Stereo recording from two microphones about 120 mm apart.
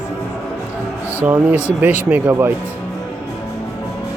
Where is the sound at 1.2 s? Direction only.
15° right (ahead or behind).